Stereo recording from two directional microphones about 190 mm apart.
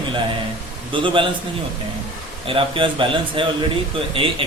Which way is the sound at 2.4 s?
25° right (ahead or behind).